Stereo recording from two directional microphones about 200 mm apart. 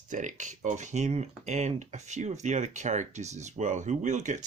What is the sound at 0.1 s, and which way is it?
Speech, 40° right (ahead or behind).